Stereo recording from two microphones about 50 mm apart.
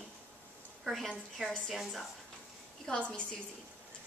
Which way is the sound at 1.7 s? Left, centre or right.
Centre.